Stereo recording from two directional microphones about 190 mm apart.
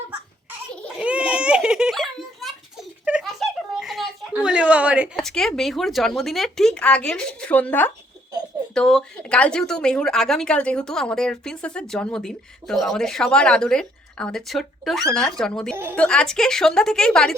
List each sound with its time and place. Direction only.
0.8 s giggle: 5° right (ahead or behind)
8.7 s a woman's voice: 5° left (ahead or behind)